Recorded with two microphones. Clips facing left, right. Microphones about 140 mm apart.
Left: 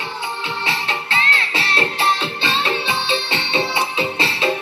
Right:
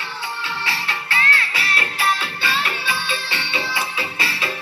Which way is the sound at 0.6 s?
20° left (ahead or behind).